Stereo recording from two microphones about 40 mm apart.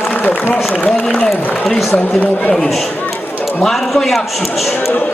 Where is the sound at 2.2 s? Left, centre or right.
Left.